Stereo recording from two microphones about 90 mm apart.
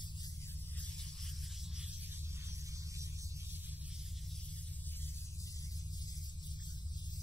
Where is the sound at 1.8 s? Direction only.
20° right (ahead or behind); by 3.4 s 35° right (ahead or behind).